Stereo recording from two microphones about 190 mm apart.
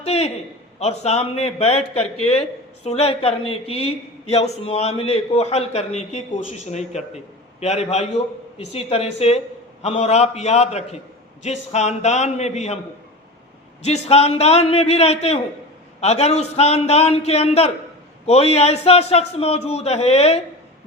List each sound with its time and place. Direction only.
0.0 s a man's voice: 35° left (ahead or behind)
13.8 s a man's voice: 35° left (ahead or behind)